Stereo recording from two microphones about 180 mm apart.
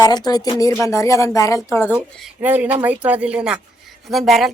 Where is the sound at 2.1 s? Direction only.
5° right (ahead or behind).